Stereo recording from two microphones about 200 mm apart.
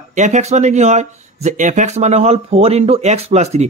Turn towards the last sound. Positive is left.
turn(degrees=-35)  # may be behind; listen again after turning